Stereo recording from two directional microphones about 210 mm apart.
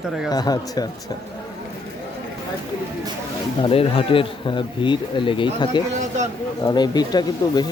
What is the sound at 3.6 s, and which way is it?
Speech, 25° left (ahead or behind).